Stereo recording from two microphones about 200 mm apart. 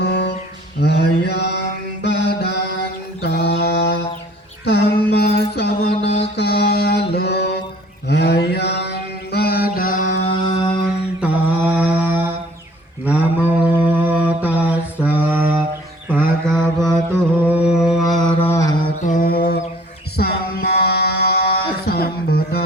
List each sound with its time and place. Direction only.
0.0 s music: 55° left (ahead or behind)
0.8 s mantra: 55° left (ahead or behind)
5.9 s mantra: 30° left (ahead or behind)
6.3 s music: 55° left (ahead or behind)
8.0 s mantra: 55° left (ahead or behind); by 10.8 s 20° left (ahead or behind)
11.2 s mantra: 10° right (ahead or behind)
17.4 s a sound: 5° right (ahead or behind)
18.4 s mantra: 15° left (ahead or behind)
19.0 s mantra: 40° left (ahead or behind)
20.1 s music: 50° left (ahead or behind)